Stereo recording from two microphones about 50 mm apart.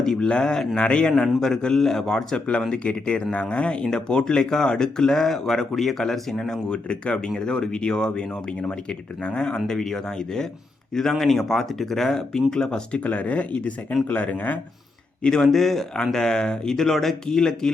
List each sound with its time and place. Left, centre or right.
0.0 s speech: centre
1.2 s speech: centre
6.7 s speech: centre
13.0 s speech: left
15.2 s speech: centre